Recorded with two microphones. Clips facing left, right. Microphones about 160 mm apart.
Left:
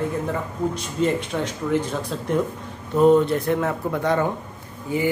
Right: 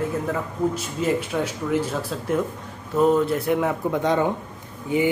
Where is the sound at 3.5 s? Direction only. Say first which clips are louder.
Right 1 dB; 15° right (ahead or behind).